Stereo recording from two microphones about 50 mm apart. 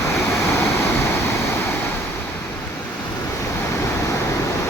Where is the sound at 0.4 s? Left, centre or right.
Left.